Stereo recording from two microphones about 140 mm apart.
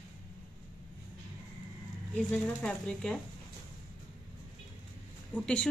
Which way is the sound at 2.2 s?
10° left (ahead or behind).